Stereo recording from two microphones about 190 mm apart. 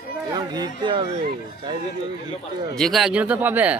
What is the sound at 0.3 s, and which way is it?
Speech, 20° right (ahead or behind).